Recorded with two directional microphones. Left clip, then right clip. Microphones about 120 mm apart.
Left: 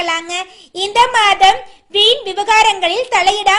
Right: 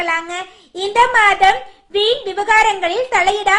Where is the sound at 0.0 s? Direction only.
60° left (ahead or behind).